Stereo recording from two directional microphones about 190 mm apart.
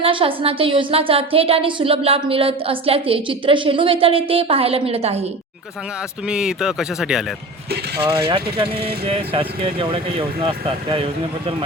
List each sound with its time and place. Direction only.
0.0 s a woman's voice: 25° right (ahead or behind)
6.2 s speech: 5° right (ahead or behind)
8.2 s a woman's voice: 25° right (ahead or behind)